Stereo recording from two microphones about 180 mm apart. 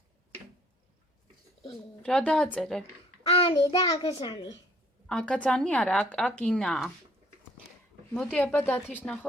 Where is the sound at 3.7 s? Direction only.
20° left (ahead or behind).